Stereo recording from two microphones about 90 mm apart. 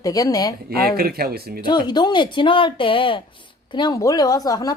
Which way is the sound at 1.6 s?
55° left (ahead or behind).